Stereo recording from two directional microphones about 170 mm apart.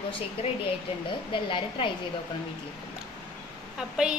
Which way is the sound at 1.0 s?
30° left (ahead or behind).